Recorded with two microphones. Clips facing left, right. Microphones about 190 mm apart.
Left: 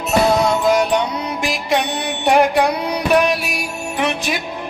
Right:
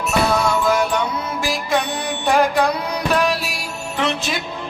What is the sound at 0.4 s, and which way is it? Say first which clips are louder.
Music: left 3 dB; 20° left (ahead or behind).